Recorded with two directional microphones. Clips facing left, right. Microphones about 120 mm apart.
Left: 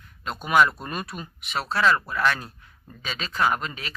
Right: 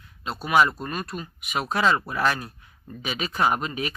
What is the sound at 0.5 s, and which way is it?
Speech, centre (ahead or behind).